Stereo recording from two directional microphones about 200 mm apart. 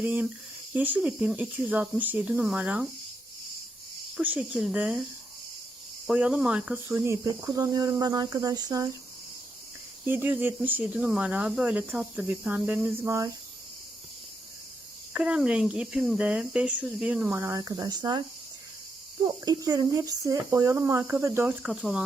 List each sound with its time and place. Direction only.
0.0 s speech: 5° right (ahead or behind)
4.2 s speech: 5° right (ahead or behind)
6.1 s speech: 5° right (ahead or behind)
10.1 s speech: 10° right (ahead or behind)
15.1 s speech: 5° right (ahead or behind); by 18.2 s 20° right (ahead or behind)
19.2 s speech: 20° right (ahead or behind); by 22.0 s centre (ahead or behind)